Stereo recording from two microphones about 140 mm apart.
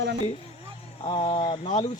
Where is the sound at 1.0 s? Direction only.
40° left (ahead or behind).